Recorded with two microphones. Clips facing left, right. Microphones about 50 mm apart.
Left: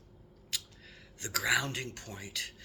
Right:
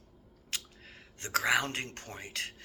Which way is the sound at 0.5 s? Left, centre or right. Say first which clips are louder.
Right 1 dB; right.